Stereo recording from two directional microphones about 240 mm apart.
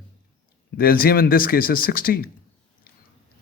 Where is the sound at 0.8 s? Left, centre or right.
Left.